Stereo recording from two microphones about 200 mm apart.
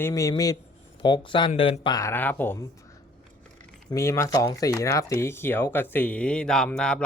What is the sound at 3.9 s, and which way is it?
Speech, 15° left (ahead or behind).